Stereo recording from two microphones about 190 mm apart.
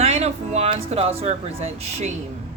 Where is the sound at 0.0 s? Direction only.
35° right (ahead or behind).